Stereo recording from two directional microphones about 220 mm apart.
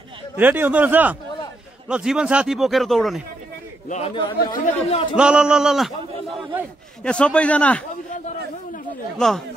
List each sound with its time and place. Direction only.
0.4 s a man's voice: 10° right (ahead or behind)
3.9 s speech: 25° left (ahead or behind)
5.1 s a man's voice: 5° right (ahead or behind)
7.0 s a man's voice: 5° left (ahead or behind)
9.2 s a man's voice: 5° left (ahead or behind)